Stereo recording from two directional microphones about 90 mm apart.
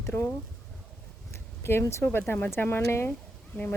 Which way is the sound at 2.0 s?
20° left (ahead or behind).